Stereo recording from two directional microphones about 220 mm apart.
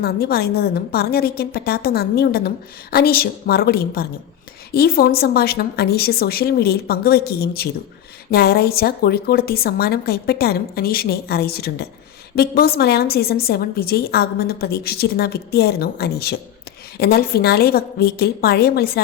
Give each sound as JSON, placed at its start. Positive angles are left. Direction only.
{"t": 0.0, "sound": "a woman's voice", "side_deg": 45}